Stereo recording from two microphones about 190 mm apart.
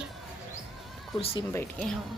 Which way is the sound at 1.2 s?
30° left (ahead or behind).